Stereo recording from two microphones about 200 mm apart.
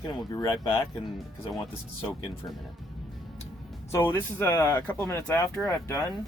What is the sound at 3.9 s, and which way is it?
Speech, 10° left (ahead or behind).